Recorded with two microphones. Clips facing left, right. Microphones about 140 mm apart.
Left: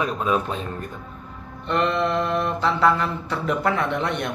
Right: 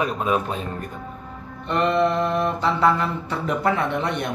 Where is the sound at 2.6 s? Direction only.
15° right (ahead or behind).